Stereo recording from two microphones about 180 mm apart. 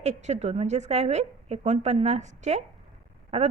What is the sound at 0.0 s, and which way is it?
A woman's voice, 40° right (ahead or behind).